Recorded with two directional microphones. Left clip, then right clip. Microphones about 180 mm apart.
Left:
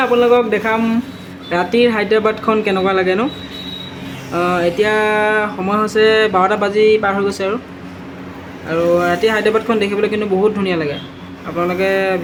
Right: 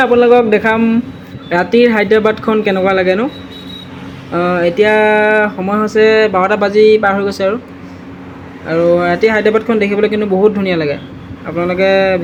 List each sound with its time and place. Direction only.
0.0 s speech: 15° right (ahead or behind)
4.3 s speech: 15° right (ahead or behind)
8.6 s speech: 15° right (ahead or behind)